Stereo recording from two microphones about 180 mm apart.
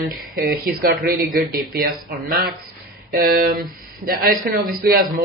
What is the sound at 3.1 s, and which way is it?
Speech, 55° right (ahead or behind).